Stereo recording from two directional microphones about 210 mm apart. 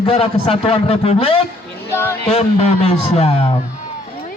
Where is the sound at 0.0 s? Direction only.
30° left (ahead or behind).